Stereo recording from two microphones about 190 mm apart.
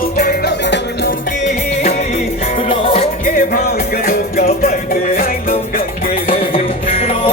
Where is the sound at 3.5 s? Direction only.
50° left (ahead or behind).